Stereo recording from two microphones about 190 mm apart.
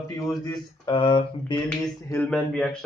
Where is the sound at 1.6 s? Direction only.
5° left (ahead or behind).